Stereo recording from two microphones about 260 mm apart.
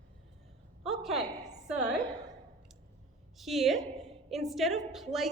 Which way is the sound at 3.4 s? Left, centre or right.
Centre.